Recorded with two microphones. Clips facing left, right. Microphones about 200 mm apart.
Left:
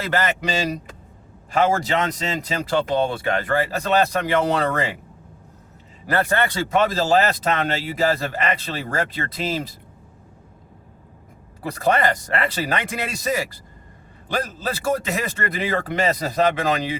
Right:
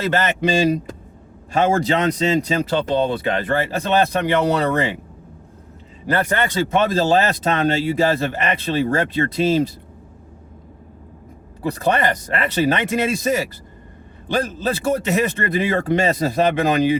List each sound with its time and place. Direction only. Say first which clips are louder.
0.1 s speech: right 2 dB; 20° right (ahead or behind)
1.5 s speech: right 2 dB; 25° right (ahead or behind)
6.1 s speech: right 1 dB; 20° right (ahead or behind)
11.8 s speech: even; 20° right (ahead or behind)